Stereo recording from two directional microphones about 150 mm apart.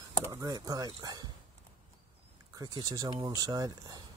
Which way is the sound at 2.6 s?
25° right (ahead or behind).